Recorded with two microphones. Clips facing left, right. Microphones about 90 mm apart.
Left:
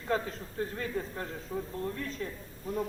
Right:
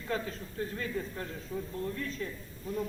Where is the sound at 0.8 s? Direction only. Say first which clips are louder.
Left 1 dB; 25° left (ahead or behind).